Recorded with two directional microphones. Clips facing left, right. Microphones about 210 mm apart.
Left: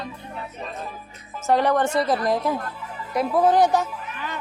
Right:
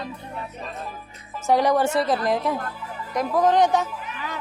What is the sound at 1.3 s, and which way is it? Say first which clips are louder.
Speech: even; 10° right (ahead or behind).